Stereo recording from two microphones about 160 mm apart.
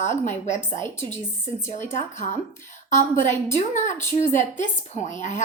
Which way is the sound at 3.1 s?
50° left (ahead or behind).